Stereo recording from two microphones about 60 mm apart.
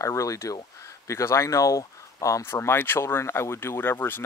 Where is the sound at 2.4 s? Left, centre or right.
Left.